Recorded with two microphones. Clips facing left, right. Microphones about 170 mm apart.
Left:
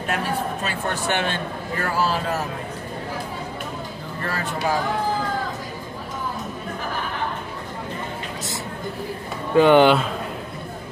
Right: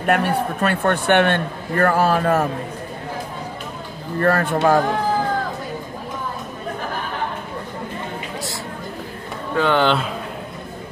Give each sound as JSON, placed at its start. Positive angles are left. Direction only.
{"t": 0.0, "sound": "a man's voice", "side_deg": -60}
{"t": 4.2, "sound": "a man's voice", "side_deg": -55}
{"t": 9.6, "sound": "speech", "side_deg": 15}